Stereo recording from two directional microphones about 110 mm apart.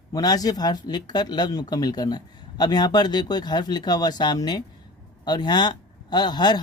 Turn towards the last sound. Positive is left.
turn(degrees=40)  # may be behind; listen again after turning